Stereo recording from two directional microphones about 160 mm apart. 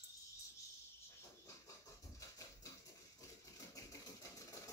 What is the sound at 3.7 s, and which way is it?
Engine, 20° left (ahead or behind).